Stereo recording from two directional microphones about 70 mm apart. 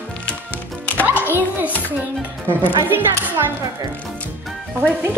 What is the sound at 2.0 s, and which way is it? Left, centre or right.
Speech, right.